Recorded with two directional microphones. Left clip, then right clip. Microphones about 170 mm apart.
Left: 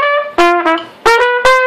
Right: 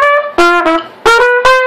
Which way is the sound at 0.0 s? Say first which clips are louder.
Right 3 dB; 35° right (ahead or behind).